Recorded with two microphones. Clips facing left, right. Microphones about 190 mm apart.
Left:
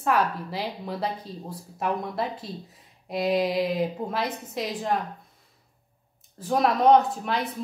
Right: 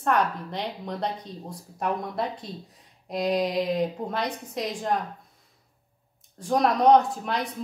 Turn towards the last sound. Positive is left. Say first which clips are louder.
# even
turn(degrees=0)  # may be behind; listen again after turning